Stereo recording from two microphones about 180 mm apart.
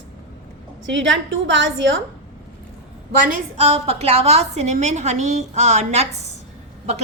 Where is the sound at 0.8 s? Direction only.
90° right.